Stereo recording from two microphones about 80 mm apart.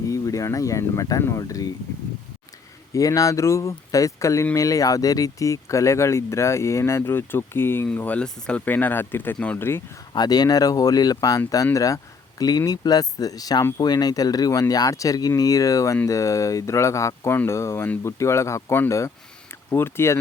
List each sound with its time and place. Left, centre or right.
0.1 s speech: left
2.9 s speech: left; by 9.6 s centre
9.6 s speech: left
10.1 s speech: left